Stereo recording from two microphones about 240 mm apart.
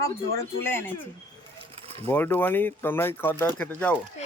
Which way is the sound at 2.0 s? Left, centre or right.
Centre.